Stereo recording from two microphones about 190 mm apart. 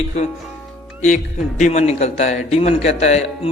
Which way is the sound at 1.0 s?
40° left (ahead or behind).